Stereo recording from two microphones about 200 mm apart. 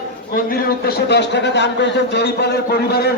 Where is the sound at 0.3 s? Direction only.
45° left (ahead or behind).